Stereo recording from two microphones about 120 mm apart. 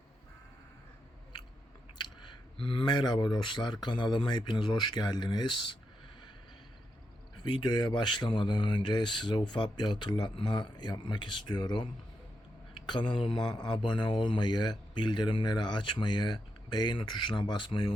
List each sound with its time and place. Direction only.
2.2 s speech: 45° left (ahead or behind)
7.6 s speech: 35° left (ahead or behind)